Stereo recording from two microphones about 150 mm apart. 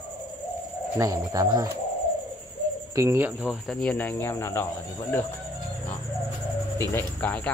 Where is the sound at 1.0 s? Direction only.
20° right (ahead or behind).